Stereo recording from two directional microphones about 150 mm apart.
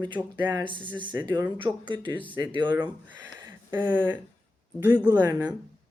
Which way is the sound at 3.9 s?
15° right (ahead or behind).